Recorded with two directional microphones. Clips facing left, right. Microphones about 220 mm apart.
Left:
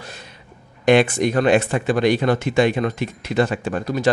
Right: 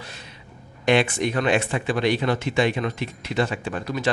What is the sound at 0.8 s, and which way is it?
Speech, 45° left (ahead or behind).